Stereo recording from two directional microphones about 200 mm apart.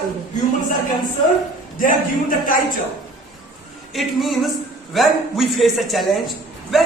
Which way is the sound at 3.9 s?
Centre (ahead or behind).